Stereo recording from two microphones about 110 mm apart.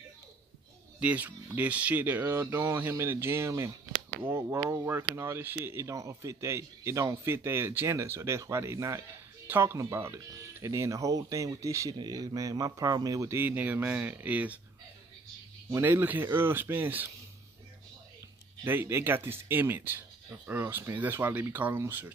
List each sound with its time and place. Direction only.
0.9 s speech: 15° right (ahead or behind); by 13.4 s 30° right (ahead or behind)
13.4 s speech: 15° right (ahead or behind)
15.7 s speech: 20° right (ahead or behind)
18.6 s speech: 20° right (ahead or behind)